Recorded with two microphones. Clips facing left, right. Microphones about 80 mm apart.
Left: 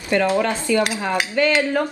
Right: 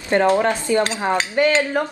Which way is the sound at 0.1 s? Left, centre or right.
Right.